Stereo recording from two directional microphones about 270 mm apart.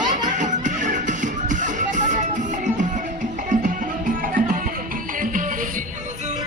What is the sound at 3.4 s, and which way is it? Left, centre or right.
Music, right.